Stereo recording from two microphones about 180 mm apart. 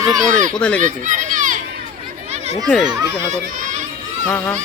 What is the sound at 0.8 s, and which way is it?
Run, 45° right (ahead or behind).